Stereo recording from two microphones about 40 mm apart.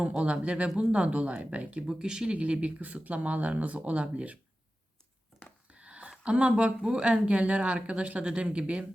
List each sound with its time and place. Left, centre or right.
0.2 s speech: right
1.9 s speech: centre
2.4 s speech: right
5.7 s speech: right